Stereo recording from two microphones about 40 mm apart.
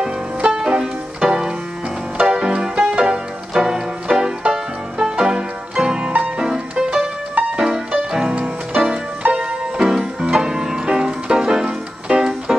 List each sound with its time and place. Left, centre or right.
0.4 s music: right
6.1 s music: right
6.4 s music: centre
9.2 s music: right
9.8 s music: centre